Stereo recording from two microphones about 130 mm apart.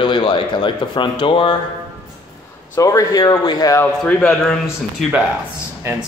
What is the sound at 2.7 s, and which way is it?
Speech, 25° left (ahead or behind).